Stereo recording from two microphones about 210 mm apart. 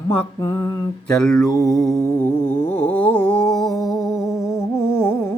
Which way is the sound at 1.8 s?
Centre (ahead or behind).